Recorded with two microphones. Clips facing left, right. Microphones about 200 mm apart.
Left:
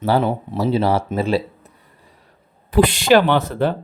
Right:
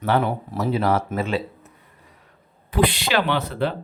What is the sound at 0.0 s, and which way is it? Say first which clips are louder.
Speech: left 3 dB; 30° left (ahead or behind).